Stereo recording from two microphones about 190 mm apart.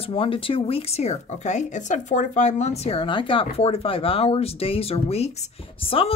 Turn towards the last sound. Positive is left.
turn(degrees=30)  # may be behind; listen again after turning